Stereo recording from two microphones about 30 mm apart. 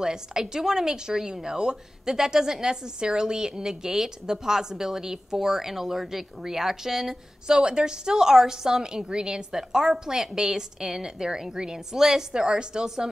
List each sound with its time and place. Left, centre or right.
0.0 s a woman's voice: right
7.5 s a woman's voice: right
9.1 s a woman's voice: right